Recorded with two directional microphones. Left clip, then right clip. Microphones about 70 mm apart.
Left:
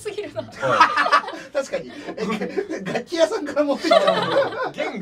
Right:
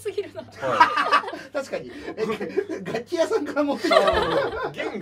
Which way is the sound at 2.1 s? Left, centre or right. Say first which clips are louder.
Right 1 dB; left.